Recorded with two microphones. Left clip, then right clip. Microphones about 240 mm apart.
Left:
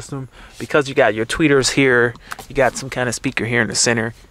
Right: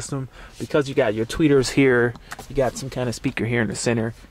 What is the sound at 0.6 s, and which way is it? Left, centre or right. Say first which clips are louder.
Speech: left 5 dB; centre.